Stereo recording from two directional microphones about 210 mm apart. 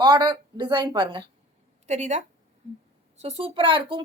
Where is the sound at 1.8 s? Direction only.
35° right (ahead or behind).